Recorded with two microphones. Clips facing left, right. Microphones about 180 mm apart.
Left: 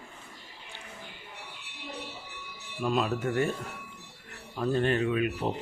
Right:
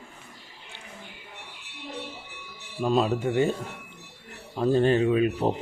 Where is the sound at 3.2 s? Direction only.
20° right (ahead or behind).